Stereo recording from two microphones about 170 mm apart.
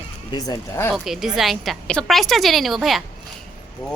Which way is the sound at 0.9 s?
Centre (ahead or behind).